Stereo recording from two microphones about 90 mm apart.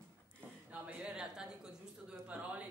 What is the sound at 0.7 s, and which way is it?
A woman's voice, 15° right (ahead or behind).